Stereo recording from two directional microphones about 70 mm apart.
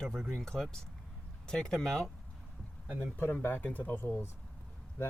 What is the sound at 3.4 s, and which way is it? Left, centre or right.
Speech, left.